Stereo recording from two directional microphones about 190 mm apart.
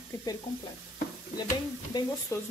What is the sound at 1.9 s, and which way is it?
Speech, 25° left (ahead or behind).